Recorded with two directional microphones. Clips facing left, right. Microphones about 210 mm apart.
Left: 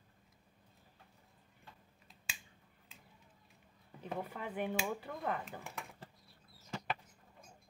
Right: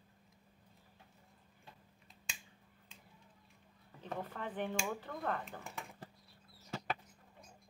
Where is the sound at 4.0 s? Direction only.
10° left (ahead or behind).